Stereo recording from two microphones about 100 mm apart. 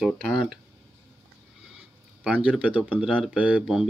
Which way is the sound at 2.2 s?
10° right (ahead or behind).